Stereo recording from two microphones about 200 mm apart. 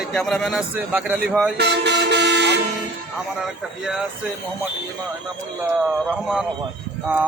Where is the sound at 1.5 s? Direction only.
60° right (ahead or behind).